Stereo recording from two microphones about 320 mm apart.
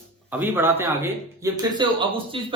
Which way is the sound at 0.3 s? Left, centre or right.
Centre.